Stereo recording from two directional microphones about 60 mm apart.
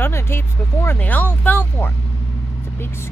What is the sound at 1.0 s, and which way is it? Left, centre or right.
Speech, left.